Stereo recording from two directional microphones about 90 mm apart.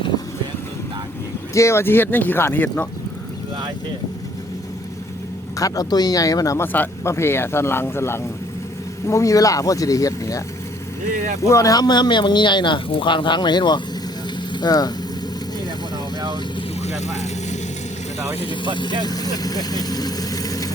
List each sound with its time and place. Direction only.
1.5 s speech: 30° left (ahead or behind)
5.5 s speech: 40° left (ahead or behind)
6.6 s speech: 30° left (ahead or behind)
11.4 s speech: 35° left (ahead or behind)
18.3 s speech: 75° left (ahead or behind)
19.0 s speech: 45° left (ahead or behind)